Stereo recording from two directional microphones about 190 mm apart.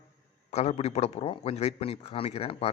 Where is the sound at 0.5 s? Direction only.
35° left (ahead or behind).